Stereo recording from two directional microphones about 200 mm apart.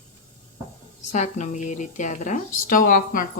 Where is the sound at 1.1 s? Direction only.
35° left (ahead or behind).